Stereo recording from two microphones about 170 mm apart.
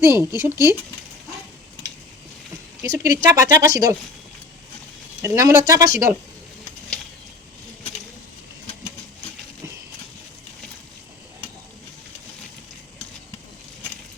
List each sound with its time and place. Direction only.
0.0 s speech: 15° right (ahead or behind)
2.8 s speech: 20° right (ahead or behind)
5.2 s speech: 15° right (ahead or behind)